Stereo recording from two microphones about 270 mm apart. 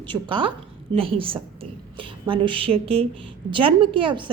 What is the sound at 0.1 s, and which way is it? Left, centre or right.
A woman's voice, centre.